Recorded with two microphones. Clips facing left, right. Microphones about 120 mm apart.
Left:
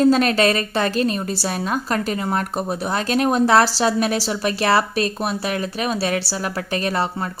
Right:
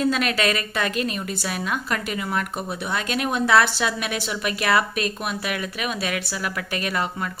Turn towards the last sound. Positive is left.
turn(degrees=35)  # may be behind; listen again after turning